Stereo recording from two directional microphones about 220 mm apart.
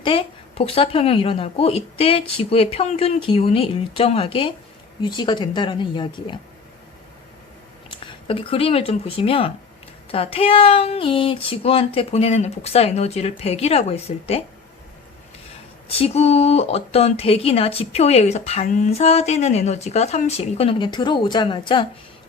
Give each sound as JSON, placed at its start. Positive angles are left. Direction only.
{"t": 0.0, "sound": "speech", "side_deg": 25}
{"t": 8.3, "sound": "speech", "side_deg": 25}
{"t": 15.9, "sound": "speech", "side_deg": 25}